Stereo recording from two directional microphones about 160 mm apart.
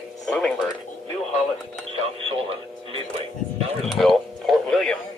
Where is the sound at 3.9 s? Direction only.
Centre (ahead or behind).